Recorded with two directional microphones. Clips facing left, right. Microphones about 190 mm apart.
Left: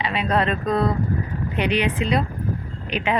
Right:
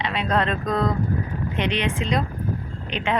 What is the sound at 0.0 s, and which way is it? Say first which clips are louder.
Speech: left 1 dB; 5° left (ahead or behind).